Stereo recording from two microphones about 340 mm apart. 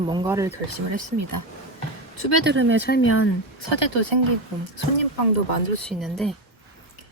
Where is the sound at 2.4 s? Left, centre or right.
Right.